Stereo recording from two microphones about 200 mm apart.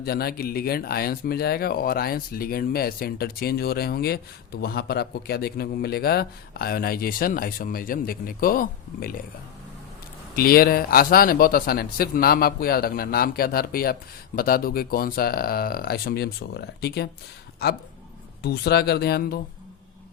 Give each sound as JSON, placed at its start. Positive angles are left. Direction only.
{"t": 0.0, "sound": "a man's voice", "side_deg": 50}
{"t": 10.3, "sound": "a man's voice", "side_deg": 50}